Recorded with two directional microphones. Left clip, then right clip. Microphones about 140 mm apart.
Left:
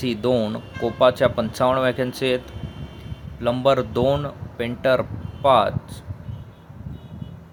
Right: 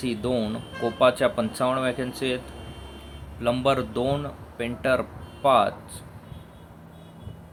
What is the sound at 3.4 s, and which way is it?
Speech, 20° left (ahead or behind).